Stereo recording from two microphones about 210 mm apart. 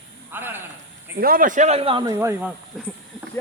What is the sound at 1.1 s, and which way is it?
A man's voice, 45° right (ahead or behind).